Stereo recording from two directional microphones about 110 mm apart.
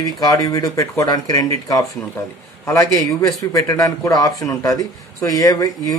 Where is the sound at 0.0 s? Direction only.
35° left (ahead or behind).